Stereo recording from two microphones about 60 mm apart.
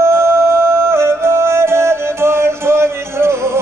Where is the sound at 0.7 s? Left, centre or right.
Right.